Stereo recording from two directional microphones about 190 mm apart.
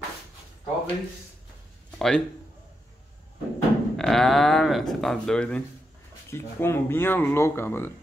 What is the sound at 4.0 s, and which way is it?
A man's voice, centre (ahead or behind).